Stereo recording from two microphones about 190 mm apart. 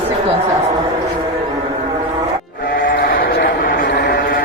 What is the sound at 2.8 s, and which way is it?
Sheep, 50° left (ahead or behind).